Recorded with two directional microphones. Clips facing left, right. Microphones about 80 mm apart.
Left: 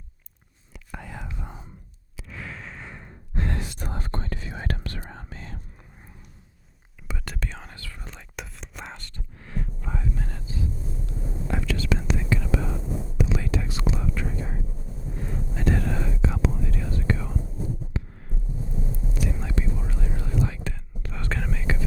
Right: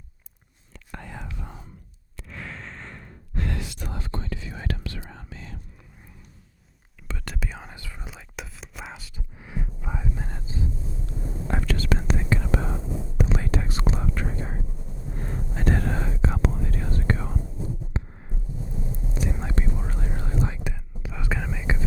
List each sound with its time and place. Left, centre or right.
0.7 s whispering: centre
1.3 s whispering: centre
2.1 s sigh: centre
3.4 s whispering: left
7.1 s whispering: centre
7.3 s whispering: centre; by 10.7 s right
11.4 s whispering: right
17.9 s a sound: right
19.1 s whispering: right
20.5 s whispering: centre